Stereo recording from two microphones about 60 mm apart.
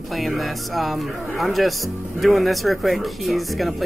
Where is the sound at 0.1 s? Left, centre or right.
Centre.